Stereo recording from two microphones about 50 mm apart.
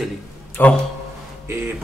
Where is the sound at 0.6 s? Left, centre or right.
Left.